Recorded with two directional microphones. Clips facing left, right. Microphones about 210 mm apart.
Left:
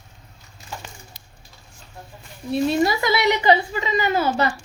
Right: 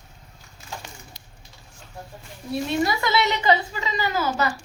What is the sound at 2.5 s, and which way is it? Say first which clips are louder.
A woman's voice: left 4 dB; 25° left (ahead or behind).